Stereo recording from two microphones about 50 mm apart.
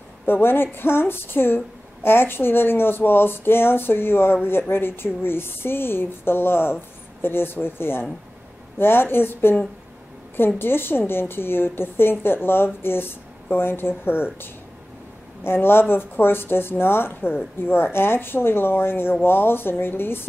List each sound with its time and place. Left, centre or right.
0.3 s speech: left